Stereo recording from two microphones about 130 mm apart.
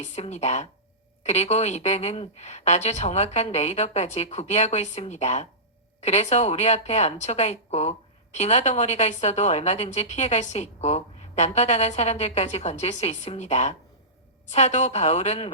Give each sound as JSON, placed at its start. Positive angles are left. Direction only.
{"t": 0.0, "sound": "speech", "side_deg": 60}